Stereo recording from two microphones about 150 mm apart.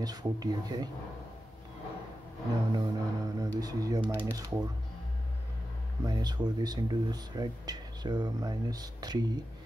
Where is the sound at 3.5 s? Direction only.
25° right (ahead or behind).